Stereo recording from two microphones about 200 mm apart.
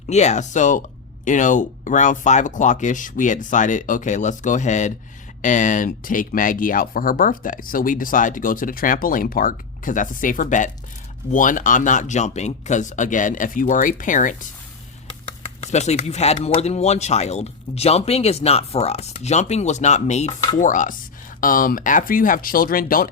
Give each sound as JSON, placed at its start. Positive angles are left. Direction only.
{"t": 0.1, "sound": "speech", "side_deg": 35}
{"t": 15.6, "sound": "speech", "side_deg": 35}